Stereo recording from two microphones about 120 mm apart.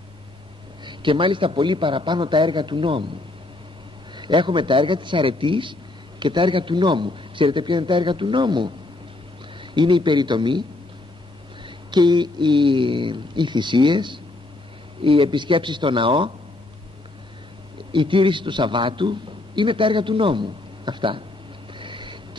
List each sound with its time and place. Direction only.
0.8 s a man's voice: 45° right (ahead or behind)
4.1 s a man's voice: 40° right (ahead or behind)
11.6 s a man's voice: 40° right (ahead or behind)
17.9 s a man's voice: 45° right (ahead or behind)
21.7 s a sound: 45° right (ahead or behind)